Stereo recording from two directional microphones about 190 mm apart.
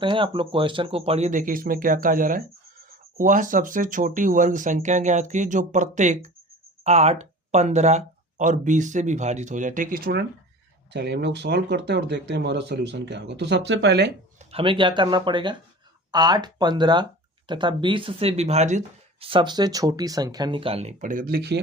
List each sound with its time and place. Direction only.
0.0 s speech: 25° right (ahead or behind); by 10.2 s 50° right (ahead or behind)
10.9 s speech: 65° right (ahead or behind)
14.3 s speech: 30° right (ahead or behind); by 21.6 s 55° right (ahead or behind)